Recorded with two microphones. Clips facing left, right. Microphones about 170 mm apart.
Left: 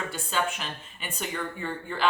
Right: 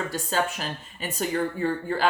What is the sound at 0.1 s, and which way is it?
A woman's voice, 40° right (ahead or behind).